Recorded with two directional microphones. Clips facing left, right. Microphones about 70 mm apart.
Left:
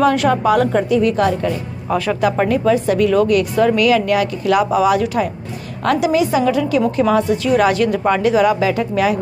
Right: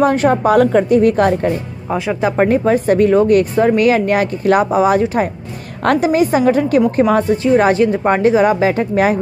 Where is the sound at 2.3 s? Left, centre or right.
Right.